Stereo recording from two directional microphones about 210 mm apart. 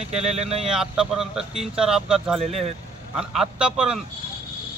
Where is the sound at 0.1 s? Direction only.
30° right (ahead or behind).